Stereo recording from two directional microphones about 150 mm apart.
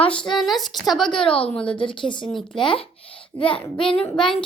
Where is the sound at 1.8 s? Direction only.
35° left (ahead or behind).